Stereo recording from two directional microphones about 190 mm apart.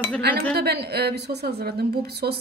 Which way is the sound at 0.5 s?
60° right (ahead or behind).